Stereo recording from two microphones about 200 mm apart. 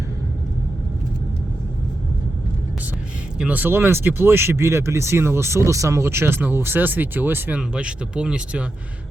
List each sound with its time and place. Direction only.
3.3 s speech: 5° right (ahead or behind)